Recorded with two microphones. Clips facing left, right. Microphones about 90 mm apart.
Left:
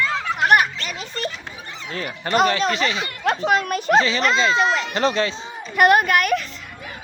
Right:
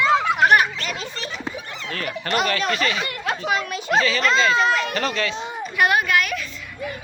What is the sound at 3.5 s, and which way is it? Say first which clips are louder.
Speech: left 4 dB; 50° left (ahead or behind).